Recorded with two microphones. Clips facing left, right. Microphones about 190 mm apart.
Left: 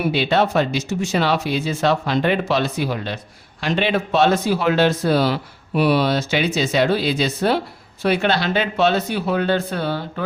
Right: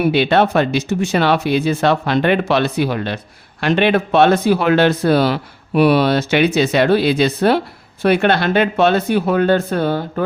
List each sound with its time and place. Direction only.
0.1 s speech: 60° right (ahead or behind)